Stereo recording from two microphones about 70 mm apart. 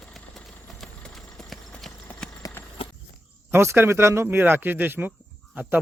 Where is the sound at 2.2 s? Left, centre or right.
Centre.